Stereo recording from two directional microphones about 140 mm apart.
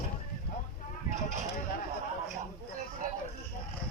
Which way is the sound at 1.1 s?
55° right (ahead or behind).